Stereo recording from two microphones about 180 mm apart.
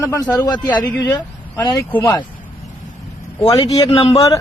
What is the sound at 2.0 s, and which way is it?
Speech, 25° left (ahead or behind).